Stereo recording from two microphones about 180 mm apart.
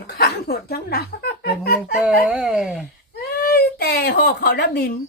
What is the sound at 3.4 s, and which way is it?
Speech, 60° left (ahead or behind).